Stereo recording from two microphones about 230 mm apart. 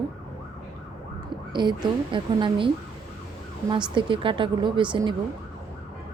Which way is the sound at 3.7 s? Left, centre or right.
Right.